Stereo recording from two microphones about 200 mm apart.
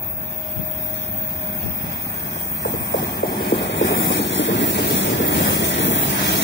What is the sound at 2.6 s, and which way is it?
Train, 60° left (ahead or behind).